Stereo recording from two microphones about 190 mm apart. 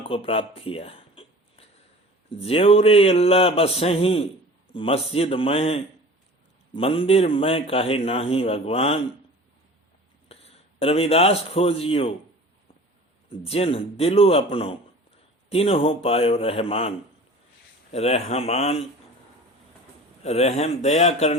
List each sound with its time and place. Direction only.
0.1 s a sound: 30° left (ahead or behind)
2.3 s a man's voice: 30° left (ahead or behind)
10.2 s a man's voice: 30° left (ahead or behind)
13.4 s speech: 30° left (ahead or behind)
17.9 s speech: 35° left (ahead or behind)
20.2 s speech: 35° left (ahead or behind)